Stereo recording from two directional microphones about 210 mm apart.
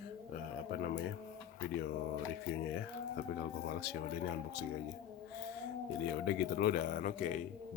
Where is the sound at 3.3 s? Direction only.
50° left (ahead or behind).